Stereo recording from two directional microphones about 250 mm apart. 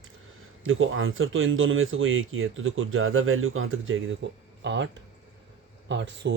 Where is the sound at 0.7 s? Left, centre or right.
Right.